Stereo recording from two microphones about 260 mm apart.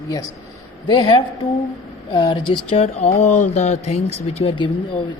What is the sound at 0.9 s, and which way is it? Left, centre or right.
Speech, centre.